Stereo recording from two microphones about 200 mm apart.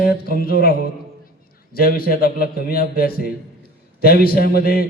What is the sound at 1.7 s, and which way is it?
A man's voice, 50° left (ahead or behind).